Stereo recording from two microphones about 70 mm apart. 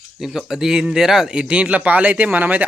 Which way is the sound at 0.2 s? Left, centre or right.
Centre.